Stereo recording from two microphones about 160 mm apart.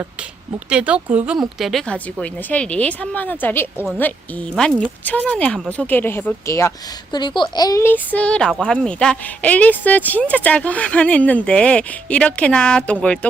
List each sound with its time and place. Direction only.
0.7 s speech: 5° right (ahead or behind)